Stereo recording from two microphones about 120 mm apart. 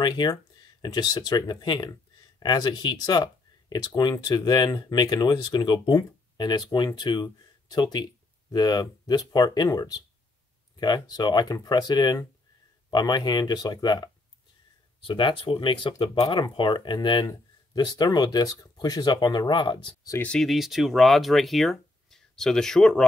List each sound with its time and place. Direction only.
0.0 s speech: 35° left (ahead or behind)
15.0 s speech: 45° left (ahead or behind)
20.2 s speech: 5° left (ahead or behind)